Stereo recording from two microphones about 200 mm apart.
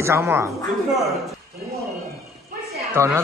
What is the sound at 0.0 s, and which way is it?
Speech, 15° right (ahead or behind).